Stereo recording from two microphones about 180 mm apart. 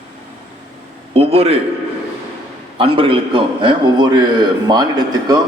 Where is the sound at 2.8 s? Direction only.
30° right (ahead or behind).